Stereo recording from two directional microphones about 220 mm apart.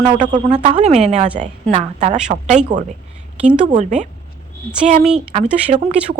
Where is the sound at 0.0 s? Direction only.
30° right (ahead or behind).